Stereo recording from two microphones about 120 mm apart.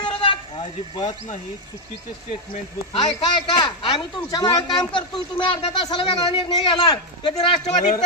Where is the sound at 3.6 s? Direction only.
40° left (ahead or behind).